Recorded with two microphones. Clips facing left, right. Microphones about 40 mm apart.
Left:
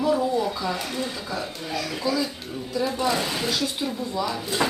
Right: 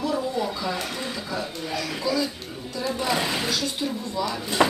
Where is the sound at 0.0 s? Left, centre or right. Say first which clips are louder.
Left 3 dB; centre.